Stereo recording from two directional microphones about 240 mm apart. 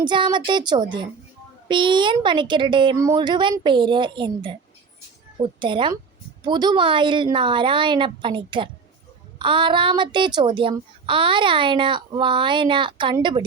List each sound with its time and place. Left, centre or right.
0.0 s a child's voice: centre